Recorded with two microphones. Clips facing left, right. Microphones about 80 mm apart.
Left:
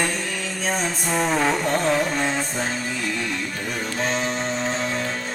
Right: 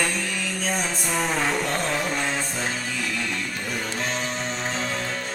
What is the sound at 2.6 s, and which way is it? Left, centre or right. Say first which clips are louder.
Music: left 2 dB; left.